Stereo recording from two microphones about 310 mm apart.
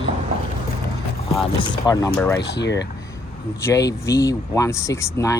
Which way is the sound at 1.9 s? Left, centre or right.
Centre.